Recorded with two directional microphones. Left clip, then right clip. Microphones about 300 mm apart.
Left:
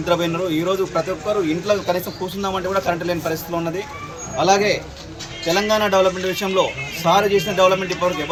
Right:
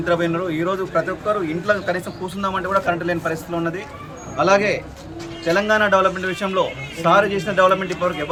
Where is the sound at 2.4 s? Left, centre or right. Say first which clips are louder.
Right 1 dB; centre.